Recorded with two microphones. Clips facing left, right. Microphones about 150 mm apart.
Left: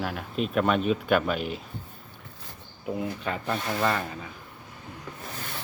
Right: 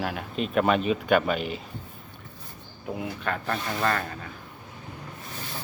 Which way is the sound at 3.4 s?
10° left (ahead or behind).